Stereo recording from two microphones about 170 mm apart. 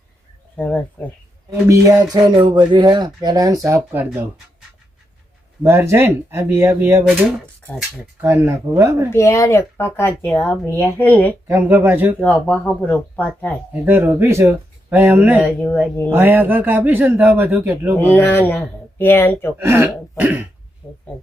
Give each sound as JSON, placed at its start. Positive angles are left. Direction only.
{"t": 0.5, "sound": "speech", "side_deg": 10}
{"t": 1.5, "sound": "a man's voice", "side_deg": -20}
{"t": 5.6, "sound": "a man's voice", "side_deg": -15}
{"t": 9.1, "sound": "speech", "side_deg": 15}
{"t": 11.4, "sound": "a man's voice", "side_deg": -15}
{"t": 12.5, "sound": "speech", "side_deg": 5}
{"t": 13.8, "sound": "a man's voice", "side_deg": -10}
{"t": 17.9, "sound": "speech", "side_deg": 10}
{"t": 19.5, "sound": "a man's voice", "side_deg": -15}
{"t": 20.8, "sound": "speech", "side_deg": 15}